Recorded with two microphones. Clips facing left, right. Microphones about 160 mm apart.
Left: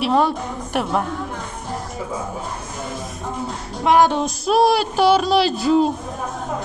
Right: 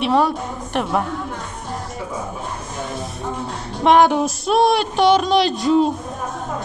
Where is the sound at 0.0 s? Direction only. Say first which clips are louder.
Even; centre (ahead or behind).